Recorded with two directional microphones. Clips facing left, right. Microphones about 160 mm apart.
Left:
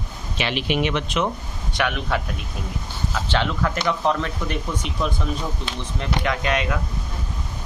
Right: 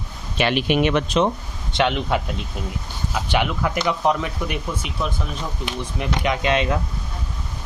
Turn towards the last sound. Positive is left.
turn(degrees=-25)  # may be behind; listen again after turning